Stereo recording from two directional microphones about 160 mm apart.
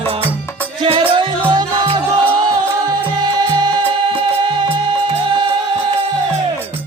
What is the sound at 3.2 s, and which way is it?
Music, 25° right (ahead or behind).